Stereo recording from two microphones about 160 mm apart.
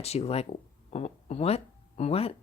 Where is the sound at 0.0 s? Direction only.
40° left (ahead or behind).